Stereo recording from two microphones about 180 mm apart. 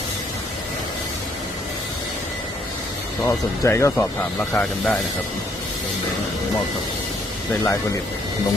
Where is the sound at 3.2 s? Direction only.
15° left (ahead or behind).